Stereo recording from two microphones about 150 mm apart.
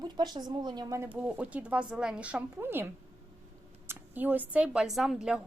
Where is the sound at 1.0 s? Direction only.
10° right (ahead or behind).